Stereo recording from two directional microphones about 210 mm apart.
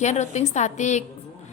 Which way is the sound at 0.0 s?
35° left (ahead or behind).